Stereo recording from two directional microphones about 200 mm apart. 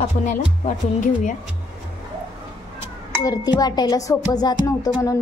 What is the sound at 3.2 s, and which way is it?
Music, 20° left (ahead or behind).